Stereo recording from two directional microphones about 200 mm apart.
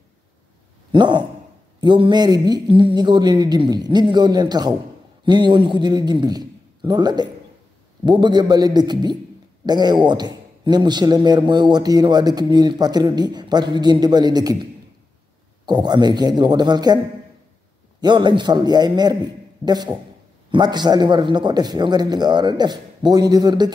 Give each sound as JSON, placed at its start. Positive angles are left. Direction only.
{"t": 0.9, "sound": "a man's voice", "side_deg": -20}
{"t": 18.0, "sound": "a man's voice", "side_deg": -25}